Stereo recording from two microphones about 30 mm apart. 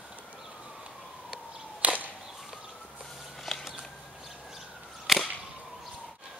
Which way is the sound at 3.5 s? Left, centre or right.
Centre.